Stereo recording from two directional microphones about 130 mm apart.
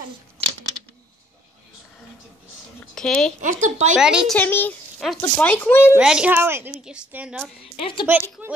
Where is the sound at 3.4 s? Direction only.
70° right (ahead or behind).